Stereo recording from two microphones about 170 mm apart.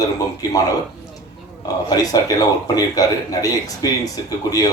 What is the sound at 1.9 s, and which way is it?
A man's voice, 20° left (ahead or behind).